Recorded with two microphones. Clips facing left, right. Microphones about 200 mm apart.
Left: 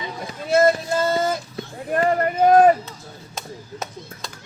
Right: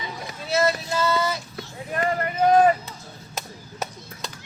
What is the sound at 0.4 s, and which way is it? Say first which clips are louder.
Male singing: left 6 dB; 50° left (ahead or behind).